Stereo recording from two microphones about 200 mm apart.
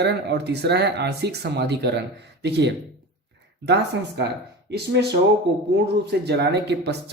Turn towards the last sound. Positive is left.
turn(degrees=-55)  # may be behind; listen again after turning